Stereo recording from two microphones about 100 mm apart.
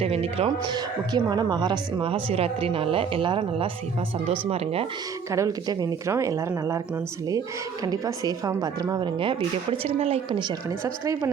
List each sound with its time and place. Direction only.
0.0 s speech: 80° right
0.6 s speech: 45° right (ahead or behind)
4.3 s speech: 90° right
5.3 s speech: 35° right (ahead or behind)
7.9 s speech: 40° right (ahead or behind); by 9.4 s 60° right (ahead or behind)
9.8 s speech: 80° right
10.7 s speech: 35° right (ahead or behind)